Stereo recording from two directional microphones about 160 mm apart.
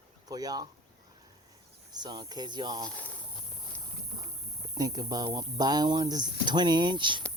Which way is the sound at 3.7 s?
10° left (ahead or behind).